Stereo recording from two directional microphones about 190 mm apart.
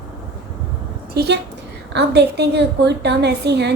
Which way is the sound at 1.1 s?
55° right (ahead or behind).